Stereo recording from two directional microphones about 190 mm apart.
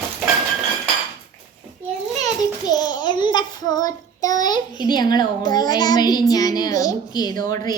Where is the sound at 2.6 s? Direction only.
20° left (ahead or behind).